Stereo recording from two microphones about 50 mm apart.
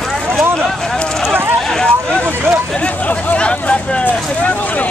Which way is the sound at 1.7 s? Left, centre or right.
Centre.